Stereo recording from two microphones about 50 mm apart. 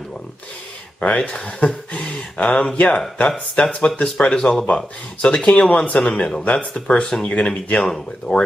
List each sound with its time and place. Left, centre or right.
1.1 s speech: centre
8.3 s speech: centre